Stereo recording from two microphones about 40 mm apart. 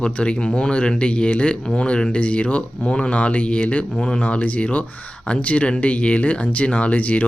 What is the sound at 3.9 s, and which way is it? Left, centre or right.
Speech, centre.